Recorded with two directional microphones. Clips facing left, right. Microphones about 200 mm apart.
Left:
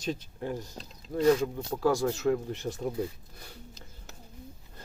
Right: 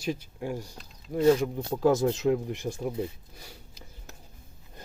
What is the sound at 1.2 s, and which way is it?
Speech, 25° right (ahead or behind).